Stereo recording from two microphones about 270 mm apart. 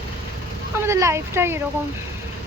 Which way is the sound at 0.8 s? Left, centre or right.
Centre.